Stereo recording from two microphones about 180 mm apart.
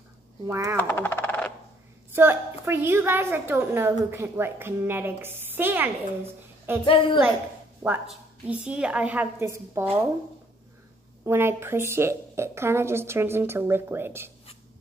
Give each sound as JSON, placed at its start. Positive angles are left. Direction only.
{"t": 0.5, "sound": "a woman's voice", "side_deg": -15}
{"t": 0.7, "sound": "a sound", "side_deg": 10}
{"t": 2.1, "sound": "a woman's voice", "side_deg": -10}
{"t": 6.8, "sound": "a woman's voice", "side_deg": 30}
{"t": 7.8, "sound": "a woman's voice", "side_deg": -10}
{"t": 11.2, "sound": "a woman's voice", "side_deg": -15}